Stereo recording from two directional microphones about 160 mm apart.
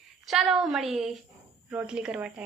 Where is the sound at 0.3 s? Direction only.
Centre (ahead or behind).